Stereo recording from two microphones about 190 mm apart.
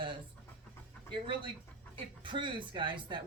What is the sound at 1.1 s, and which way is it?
Speech, 25° right (ahead or behind).